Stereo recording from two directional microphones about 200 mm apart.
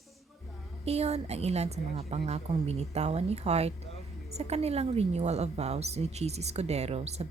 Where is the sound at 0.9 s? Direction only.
30° right (ahead or behind).